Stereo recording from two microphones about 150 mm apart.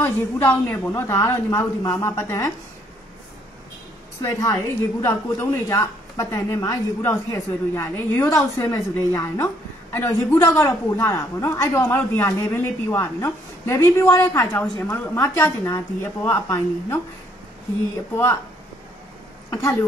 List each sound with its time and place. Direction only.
0.0 s a woman's voice: 15° left (ahead or behind)
4.2 s a woman's voice: 25° left (ahead or behind)
19.5 s a woman's voice: 20° left (ahead or behind)